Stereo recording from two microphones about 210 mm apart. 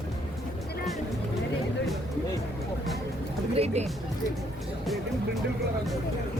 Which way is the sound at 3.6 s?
30° right (ahead or behind).